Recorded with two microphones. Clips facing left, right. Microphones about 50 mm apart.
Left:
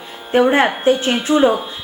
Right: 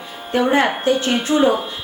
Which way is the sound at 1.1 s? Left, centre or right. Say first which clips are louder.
Left 2 dB; centre.